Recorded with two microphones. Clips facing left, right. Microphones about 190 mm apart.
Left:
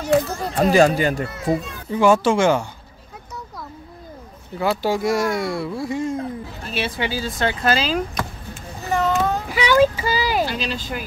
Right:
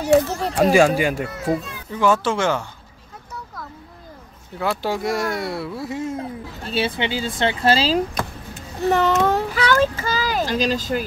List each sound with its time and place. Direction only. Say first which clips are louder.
0.1 s a child's voice: right 2 dB; 10° right (ahead or behind)
1.5 s speech: left 3 dB; 10° left (ahead or behind)
4.6 s speech: left 3 dB; centre (ahead or behind)
6.6 s speech: right 3 dB; 30° right (ahead or behind)
8.9 s speech: right 1 dB; 70° right (ahead or behind)
9.6 s a child's voice: left 7 dB; 10° left (ahead or behind)
10.5 s speech: right 6 dB; 40° right (ahead or behind)